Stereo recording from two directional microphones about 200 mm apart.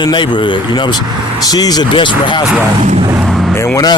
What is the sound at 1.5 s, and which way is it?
Speech, 20° left (ahead or behind).